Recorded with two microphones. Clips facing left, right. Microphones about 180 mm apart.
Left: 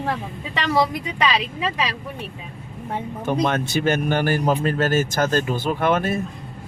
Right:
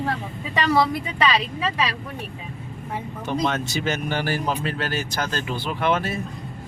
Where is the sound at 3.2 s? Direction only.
50° left (ahead or behind).